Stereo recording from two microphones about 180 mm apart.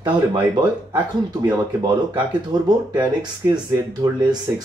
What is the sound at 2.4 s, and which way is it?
Speech, 25° right (ahead or behind).